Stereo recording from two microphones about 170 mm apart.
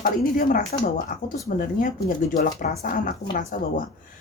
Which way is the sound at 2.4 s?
40° left (ahead or behind).